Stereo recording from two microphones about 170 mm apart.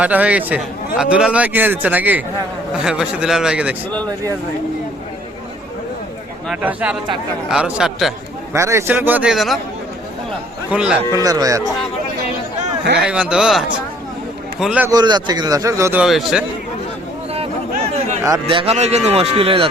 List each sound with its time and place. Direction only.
0.0 s a man's voice: 10° right (ahead or behind)
6.5 s a man's voice: 10° right (ahead or behind)
8.5 s a man's voice: 15° right (ahead or behind)
10.7 s a man's voice: 5° right (ahead or behind)
11.1 s a man's voice: 20° right (ahead or behind)
13.0 s a man's voice: 5° right (ahead or behind)
14.8 s a man's voice: 25° right (ahead or behind); by 16.4 s 5° right (ahead or behind)
18.4 s speech: 35° right (ahead or behind)